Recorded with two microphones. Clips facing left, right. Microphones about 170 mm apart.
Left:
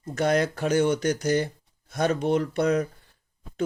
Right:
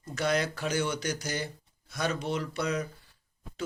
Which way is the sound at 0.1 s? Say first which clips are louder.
Left 6 dB; 50° left (ahead or behind).